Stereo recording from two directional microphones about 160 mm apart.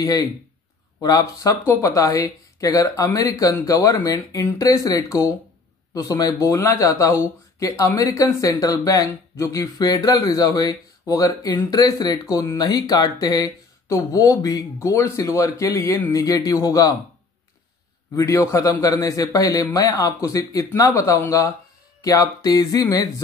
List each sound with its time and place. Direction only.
0.0 s speech: 20° left (ahead or behind)
18.1 s speech: 20° left (ahead or behind)